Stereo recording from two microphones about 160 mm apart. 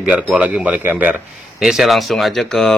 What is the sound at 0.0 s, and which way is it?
Speech, 10° right (ahead or behind).